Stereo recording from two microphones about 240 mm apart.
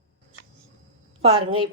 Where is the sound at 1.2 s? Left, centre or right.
Right.